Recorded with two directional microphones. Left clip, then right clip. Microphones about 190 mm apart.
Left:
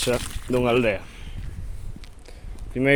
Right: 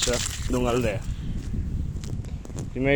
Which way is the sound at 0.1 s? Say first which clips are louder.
Left 3 dB; 40° left (ahead or behind).